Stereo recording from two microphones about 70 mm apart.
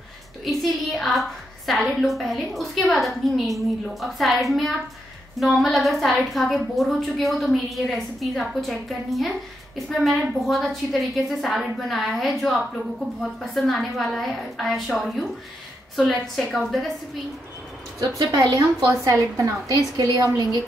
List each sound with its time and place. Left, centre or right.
0.5 s a woman's voice: centre
18.2 s a woman's voice: right